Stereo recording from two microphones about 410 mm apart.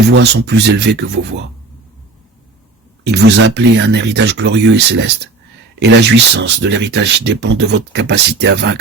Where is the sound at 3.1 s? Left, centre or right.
Right.